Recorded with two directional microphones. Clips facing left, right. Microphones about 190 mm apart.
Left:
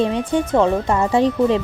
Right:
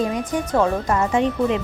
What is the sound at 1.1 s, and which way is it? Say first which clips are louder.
Speech: left 5 dB; 35° left (ahead or behind).